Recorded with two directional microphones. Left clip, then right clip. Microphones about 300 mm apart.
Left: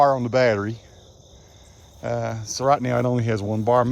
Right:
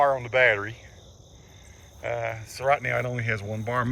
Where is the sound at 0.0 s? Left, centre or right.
Centre.